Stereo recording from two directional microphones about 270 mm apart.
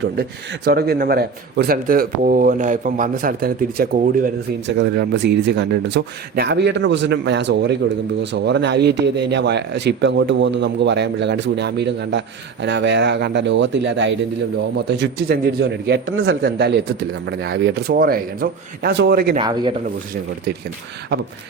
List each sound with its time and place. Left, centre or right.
0.0 s a man's voice: right
19.4 s speech: centre